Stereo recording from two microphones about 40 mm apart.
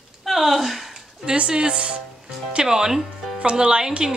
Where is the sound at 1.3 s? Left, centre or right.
Right.